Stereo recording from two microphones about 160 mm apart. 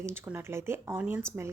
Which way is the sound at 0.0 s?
15° right (ahead or behind).